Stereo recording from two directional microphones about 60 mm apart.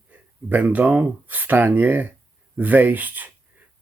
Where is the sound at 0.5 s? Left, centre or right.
Right.